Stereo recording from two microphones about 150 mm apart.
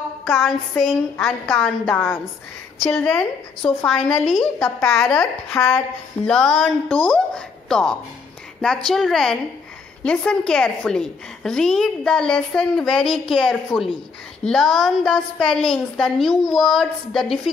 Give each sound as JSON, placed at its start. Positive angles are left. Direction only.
{"t": 0.2, "sound": "a woman's voice", "side_deg": 0}
{"t": 4.6, "sound": "speech", "side_deg": 15}
{"t": 4.9, "sound": "a woman's voice", "side_deg": 5}